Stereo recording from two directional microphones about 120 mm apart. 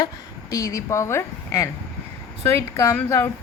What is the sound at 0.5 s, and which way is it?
A woman's voice, 30° left (ahead or behind).